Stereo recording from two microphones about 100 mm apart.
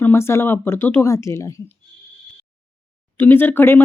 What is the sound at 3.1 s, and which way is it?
Speech, 20° left (ahead or behind).